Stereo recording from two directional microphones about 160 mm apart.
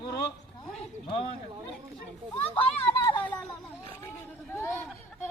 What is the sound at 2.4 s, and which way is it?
Speech, 10° left (ahead or behind).